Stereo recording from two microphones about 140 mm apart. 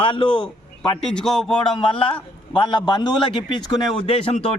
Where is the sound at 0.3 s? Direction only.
5° left (ahead or behind).